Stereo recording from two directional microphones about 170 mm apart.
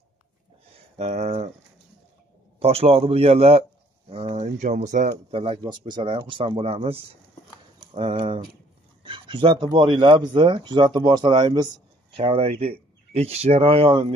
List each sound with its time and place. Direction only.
0.9 s speech: 40° right (ahead or behind)
2.6 s speech: 35° right (ahead or behind)
5.3 s speech: 30° right (ahead or behind)